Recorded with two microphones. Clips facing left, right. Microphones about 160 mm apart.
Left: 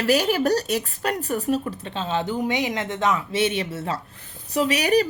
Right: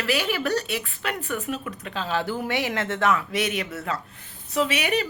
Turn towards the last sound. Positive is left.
turn(degrees=40)  # may be behind; listen again after turning